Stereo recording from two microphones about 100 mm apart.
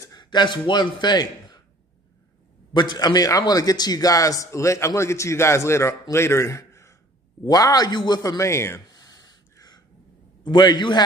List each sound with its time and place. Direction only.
0.1 s a man's voice: 50° left (ahead or behind)
2.7 s a man's voice: 45° left (ahead or behind); by 8.8 s 25° left (ahead or behind)
8.8 s gasp: 40° left (ahead or behind)
10.4 s a man's voice: 50° left (ahead or behind)